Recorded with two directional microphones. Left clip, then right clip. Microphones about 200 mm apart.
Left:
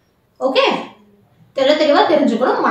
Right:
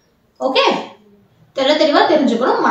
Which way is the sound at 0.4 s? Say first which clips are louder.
Even; centre (ahead or behind).